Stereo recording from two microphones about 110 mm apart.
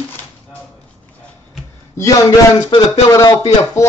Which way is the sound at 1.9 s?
30° left (ahead or behind).